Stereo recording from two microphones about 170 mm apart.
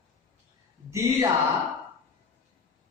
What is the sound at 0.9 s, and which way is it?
Speech, 20° right (ahead or behind).